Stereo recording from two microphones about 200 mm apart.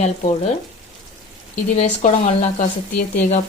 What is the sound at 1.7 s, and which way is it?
Speech, 35° left (ahead or behind).